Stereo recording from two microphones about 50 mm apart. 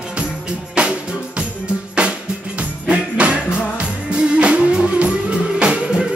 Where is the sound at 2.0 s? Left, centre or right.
Right.